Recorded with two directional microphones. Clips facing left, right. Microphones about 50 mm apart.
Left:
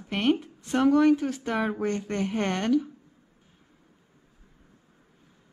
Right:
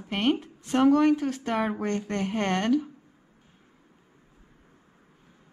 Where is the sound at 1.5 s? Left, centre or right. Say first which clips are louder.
Even; right.